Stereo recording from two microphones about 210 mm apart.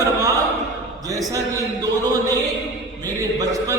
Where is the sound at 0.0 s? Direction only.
15° right (ahead or behind).